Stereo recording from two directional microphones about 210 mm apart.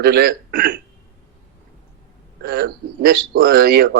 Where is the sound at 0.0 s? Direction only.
50° right (ahead or behind).